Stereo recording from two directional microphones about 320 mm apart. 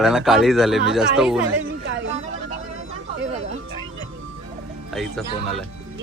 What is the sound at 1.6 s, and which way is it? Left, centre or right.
Chatter, right.